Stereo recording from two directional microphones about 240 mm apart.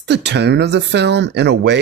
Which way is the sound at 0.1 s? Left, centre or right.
Right.